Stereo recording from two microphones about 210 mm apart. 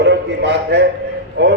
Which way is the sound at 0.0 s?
55° right (ahead or behind).